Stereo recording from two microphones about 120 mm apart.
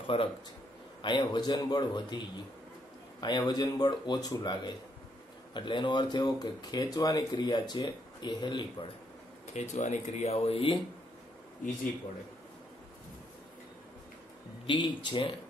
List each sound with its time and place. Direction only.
0.0 s speech: 50° left (ahead or behind)
1.0 s speech: 40° left (ahead or behind)
9.5 s speech: 75° left (ahead or behind); by 10.8 s 50° left (ahead or behind)
14.7 s speech: 40° left (ahead or behind)